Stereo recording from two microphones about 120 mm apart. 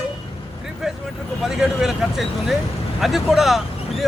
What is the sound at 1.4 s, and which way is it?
Speech, 5° right (ahead or behind).